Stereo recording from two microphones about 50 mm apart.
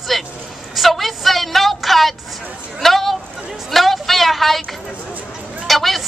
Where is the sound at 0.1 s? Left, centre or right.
Centre.